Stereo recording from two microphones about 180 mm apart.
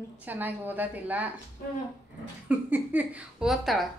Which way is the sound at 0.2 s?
10° right (ahead or behind).